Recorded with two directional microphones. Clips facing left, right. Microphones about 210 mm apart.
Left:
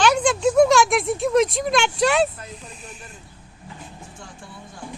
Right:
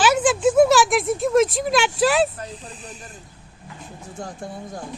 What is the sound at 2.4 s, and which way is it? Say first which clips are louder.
Speech: right 3 dB; 35° right (ahead or behind).